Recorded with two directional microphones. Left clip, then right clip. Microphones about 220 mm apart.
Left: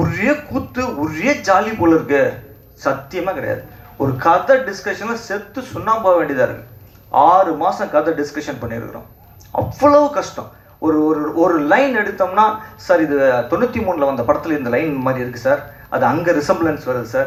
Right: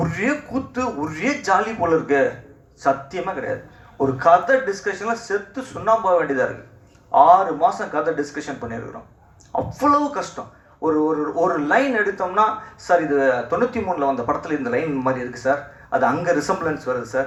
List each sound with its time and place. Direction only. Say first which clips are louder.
0.0 s speech: left 5 dB; 55° right (ahead or behind)